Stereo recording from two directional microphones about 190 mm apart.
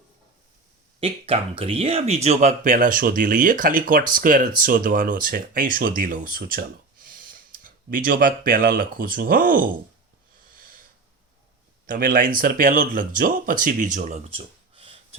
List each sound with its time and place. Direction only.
0.9 s speech: 30° right (ahead or behind); by 9.6 s 45° right (ahead or behind)
10.5 s wheeze: 50° right (ahead or behind)
11.9 s speech: 45° right (ahead or behind); by 14.9 s 30° right (ahead or behind)